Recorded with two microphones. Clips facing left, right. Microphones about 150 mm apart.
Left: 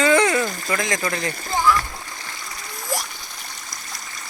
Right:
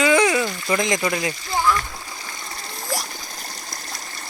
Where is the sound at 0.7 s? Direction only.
20° right (ahead or behind).